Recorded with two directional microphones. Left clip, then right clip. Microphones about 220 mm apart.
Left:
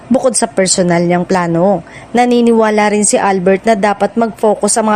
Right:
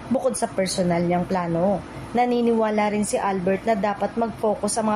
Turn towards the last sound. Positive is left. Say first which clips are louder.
# left 11 dB
turn(degrees=45)  # may be behind; listen again after turning